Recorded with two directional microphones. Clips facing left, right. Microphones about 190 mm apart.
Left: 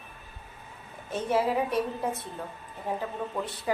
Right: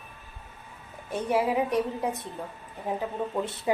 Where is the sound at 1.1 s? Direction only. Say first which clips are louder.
Right 1 dB; 15° right (ahead or behind).